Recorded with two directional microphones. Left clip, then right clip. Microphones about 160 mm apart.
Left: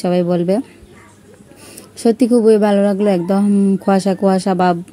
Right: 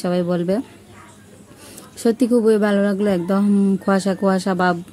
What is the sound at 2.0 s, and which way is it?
Speech, 10° left (ahead or behind).